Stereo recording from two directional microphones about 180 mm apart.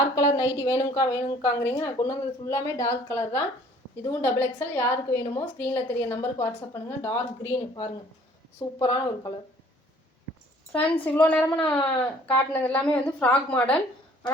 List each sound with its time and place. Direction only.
0.3 s a woman's voice: 15° left (ahead or behind)
10.7 s a woman's voice: 10° left (ahead or behind)